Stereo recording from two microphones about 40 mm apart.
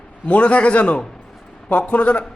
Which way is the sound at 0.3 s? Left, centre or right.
Left.